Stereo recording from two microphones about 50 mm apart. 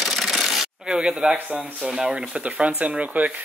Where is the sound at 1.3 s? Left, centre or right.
Right.